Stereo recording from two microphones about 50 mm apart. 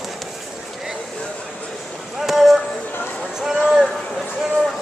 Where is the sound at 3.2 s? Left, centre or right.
Centre.